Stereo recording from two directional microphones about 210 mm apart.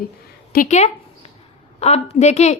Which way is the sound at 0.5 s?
35° left (ahead or behind).